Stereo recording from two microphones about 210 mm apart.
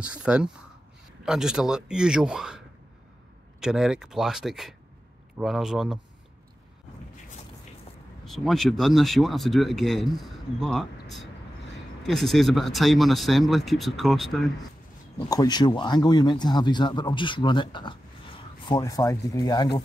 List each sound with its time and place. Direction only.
0.0 s speech: 5° right (ahead or behind)
3.6 s speech: 5° right (ahead or behind)
8.3 s speech: centre (ahead or behind)
15.1 s speech: 20° left (ahead or behind)